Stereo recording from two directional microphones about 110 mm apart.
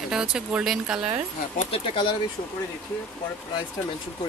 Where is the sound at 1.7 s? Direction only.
50° left (ahead or behind).